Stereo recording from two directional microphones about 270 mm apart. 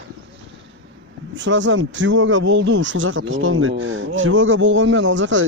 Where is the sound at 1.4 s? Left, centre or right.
Right.